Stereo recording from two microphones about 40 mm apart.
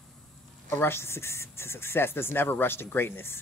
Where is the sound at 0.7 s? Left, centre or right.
Left.